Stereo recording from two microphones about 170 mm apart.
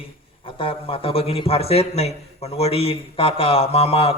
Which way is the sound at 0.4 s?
30° left (ahead or behind).